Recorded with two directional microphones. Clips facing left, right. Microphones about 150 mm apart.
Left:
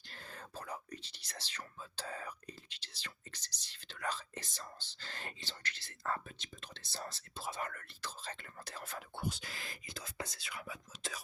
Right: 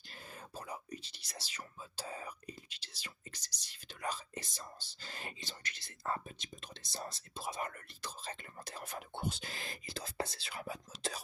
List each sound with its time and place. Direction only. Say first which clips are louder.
0.1 s whispering: even; 15° right (ahead or behind); by 11.2 s 35° right (ahead or behind)